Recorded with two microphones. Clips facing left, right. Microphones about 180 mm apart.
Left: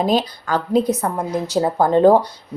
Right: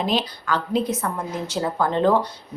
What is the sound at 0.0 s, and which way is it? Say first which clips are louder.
Speech: left 5 dB; 40° left (ahead or behind).